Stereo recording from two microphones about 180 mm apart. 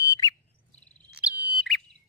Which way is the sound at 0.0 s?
20° left (ahead or behind).